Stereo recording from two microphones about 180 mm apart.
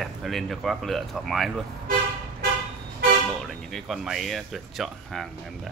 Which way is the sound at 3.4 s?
Centre (ahead or behind).